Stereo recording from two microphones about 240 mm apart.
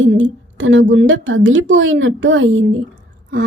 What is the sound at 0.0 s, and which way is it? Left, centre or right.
A woman's voice, right.